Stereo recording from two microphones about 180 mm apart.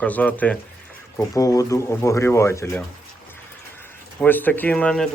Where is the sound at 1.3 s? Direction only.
20° left (ahead or behind).